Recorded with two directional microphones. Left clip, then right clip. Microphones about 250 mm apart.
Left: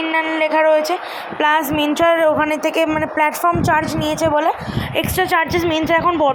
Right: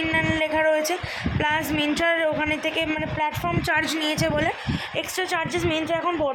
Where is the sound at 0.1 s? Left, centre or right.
Centre.